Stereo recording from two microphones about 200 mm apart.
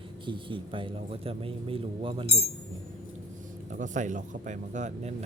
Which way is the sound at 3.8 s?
40° right (ahead or behind).